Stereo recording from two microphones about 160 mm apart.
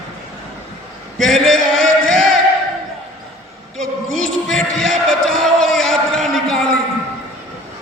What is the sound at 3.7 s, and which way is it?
Music, centre (ahead or behind).